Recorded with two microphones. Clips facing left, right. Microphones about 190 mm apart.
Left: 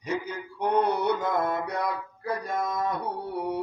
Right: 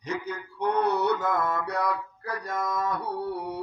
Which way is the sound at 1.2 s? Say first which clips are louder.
Left 1 dB; 25° left (ahead or behind).